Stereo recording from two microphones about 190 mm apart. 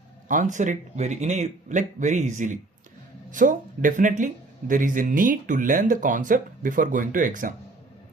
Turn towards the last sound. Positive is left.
turn(degrees=-45)  # may be behind; listen again after turning